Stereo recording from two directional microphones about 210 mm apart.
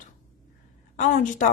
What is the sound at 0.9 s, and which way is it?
Speech, 35° left (ahead or behind).